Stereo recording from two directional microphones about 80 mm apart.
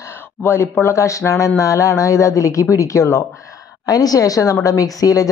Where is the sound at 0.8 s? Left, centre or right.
Left.